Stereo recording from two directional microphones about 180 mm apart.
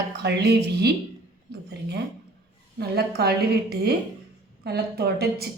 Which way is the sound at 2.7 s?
65° right (ahead or behind).